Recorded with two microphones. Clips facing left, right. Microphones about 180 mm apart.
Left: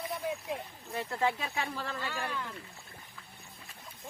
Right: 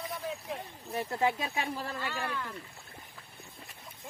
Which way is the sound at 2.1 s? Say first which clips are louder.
Right 1 dB; 15° left (ahead or behind).